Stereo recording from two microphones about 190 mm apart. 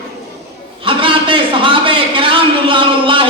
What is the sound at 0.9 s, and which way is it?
A man's voice, 25° right (ahead or behind).